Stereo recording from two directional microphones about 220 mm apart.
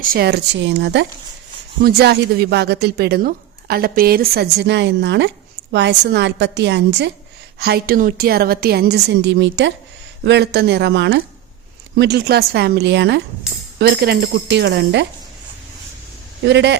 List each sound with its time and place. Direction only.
0.0 s speech: 40° right (ahead or behind)
16.5 s speech: 50° right (ahead or behind)